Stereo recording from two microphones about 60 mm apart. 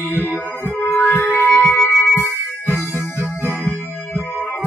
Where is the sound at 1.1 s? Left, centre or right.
Left.